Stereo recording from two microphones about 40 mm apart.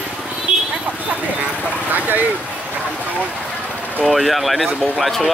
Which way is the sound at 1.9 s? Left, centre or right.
Right.